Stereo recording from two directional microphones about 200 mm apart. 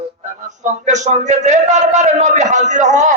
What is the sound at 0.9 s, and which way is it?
Speech, 35° right (ahead or behind).